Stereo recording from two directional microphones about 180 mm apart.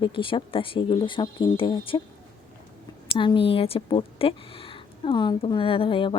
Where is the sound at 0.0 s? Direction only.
30° left (ahead or behind).